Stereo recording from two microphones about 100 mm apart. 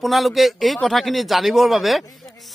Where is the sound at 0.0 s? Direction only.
Centre (ahead or behind).